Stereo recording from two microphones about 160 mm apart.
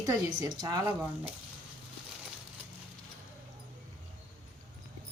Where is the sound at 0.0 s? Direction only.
25° right (ahead or behind).